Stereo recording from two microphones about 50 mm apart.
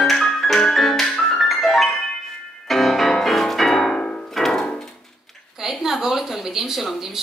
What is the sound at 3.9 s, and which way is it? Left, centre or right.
Music, left.